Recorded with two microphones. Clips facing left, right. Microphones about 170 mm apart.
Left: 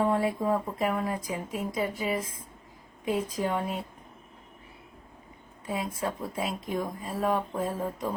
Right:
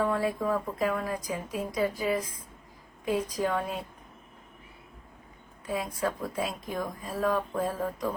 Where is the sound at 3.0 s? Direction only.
25° left (ahead or behind).